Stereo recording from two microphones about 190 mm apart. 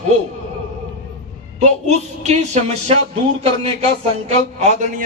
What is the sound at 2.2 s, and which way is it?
Speech, 35° right (ahead or behind).